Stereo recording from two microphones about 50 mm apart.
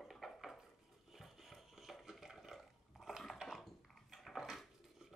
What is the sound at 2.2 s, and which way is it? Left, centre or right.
Water, centre.